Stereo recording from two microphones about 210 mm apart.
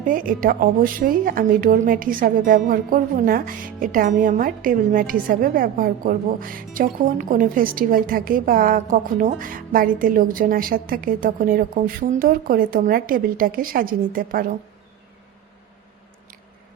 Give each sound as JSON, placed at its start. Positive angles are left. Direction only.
{"t": 0.0, "sound": "a woman's voice", "side_deg": -40}